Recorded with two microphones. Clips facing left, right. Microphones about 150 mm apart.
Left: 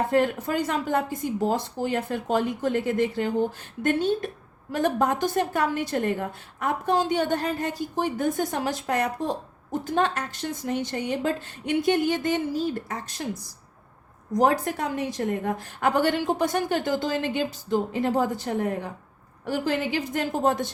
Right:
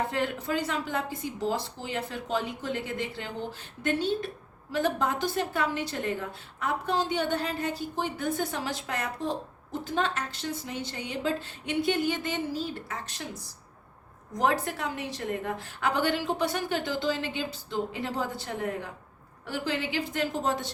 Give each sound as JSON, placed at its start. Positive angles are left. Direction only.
{"t": 0.1, "sound": "a woman's voice", "side_deg": 45}
{"t": 14.3, "sound": "a woman's voice", "side_deg": 40}